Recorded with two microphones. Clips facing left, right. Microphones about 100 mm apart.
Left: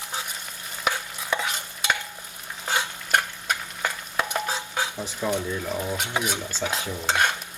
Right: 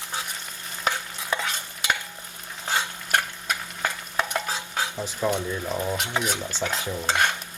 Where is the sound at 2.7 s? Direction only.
15° left (ahead or behind).